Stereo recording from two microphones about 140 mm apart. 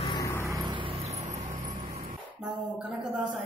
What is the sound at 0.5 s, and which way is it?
Vehicle, 30° right (ahead or behind).